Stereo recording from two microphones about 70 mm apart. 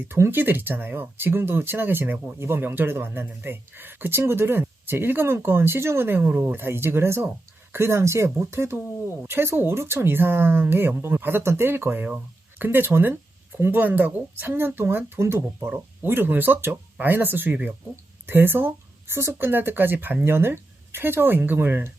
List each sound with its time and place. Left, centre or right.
0.1 s speech: right